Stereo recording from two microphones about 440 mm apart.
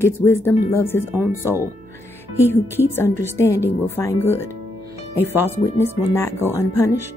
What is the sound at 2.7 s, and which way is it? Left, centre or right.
Speech, centre.